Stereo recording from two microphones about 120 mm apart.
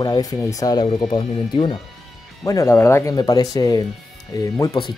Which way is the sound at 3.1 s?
35° left (ahead or behind).